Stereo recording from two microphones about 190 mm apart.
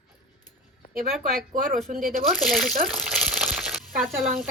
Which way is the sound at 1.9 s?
45° right (ahead or behind).